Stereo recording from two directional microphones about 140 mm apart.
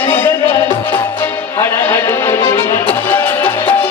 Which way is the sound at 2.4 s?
35° left (ahead or behind).